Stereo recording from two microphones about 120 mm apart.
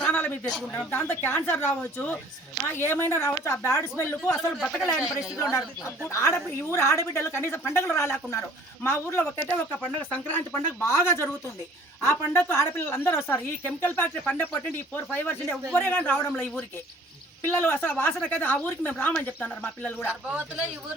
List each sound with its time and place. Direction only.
0.0 s a sound: 10° left (ahead or behind)
0.7 s a woman's voice: 20° left (ahead or behind)
4.4 s speech: centre (ahead or behind)
5.4 s a woman's voice: 25° left (ahead or behind)